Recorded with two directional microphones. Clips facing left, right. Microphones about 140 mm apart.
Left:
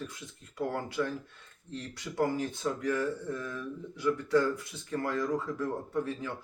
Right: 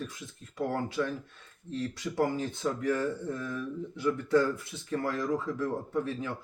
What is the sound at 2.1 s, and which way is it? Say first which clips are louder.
A man's voice: even; 20° right (ahead or behind).